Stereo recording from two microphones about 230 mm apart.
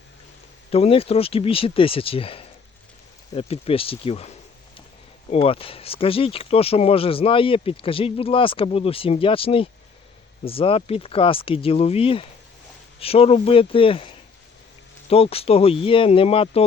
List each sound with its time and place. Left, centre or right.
0.7 s speech: left
5.3 s speech: left
15.1 s speech: left